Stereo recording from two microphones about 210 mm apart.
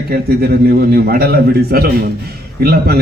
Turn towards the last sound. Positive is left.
turn(degrees=-50)  # may be behind; listen again after turning